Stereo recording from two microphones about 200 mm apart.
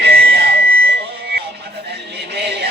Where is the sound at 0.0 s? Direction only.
55° right (ahead or behind).